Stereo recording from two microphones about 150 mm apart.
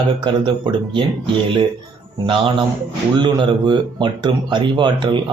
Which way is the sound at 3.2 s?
30° right (ahead or behind).